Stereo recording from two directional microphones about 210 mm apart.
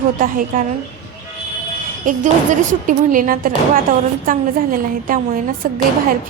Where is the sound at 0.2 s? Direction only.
40° right (ahead or behind).